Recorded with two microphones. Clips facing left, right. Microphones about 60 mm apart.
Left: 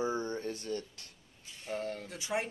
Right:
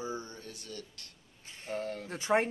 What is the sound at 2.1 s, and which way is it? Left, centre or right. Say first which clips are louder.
Speech: right 9 dB; right.